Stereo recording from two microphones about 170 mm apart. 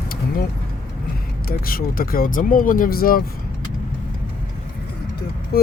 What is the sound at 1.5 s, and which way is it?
Speech, 60° left (ahead or behind).